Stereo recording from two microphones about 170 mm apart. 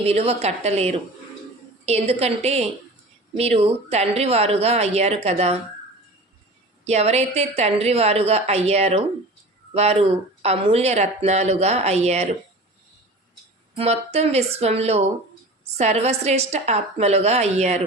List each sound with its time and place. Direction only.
0.0 s speech: 35° right (ahead or behind)
6.8 s speech: 40° right (ahead or behind)
13.7 s speech: 35° right (ahead or behind)